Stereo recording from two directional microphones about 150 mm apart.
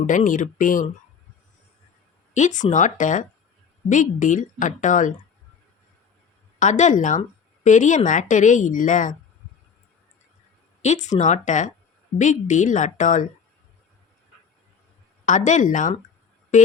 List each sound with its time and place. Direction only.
0.0 s a woman's voice: 60° left (ahead or behind)
2.3 s a woman's voice: 55° left (ahead or behind)
6.6 s a woman's voice: 55° left (ahead or behind)
10.8 s a woman's voice: 50° left (ahead or behind)
15.3 s a woman's voice: 55° left (ahead or behind)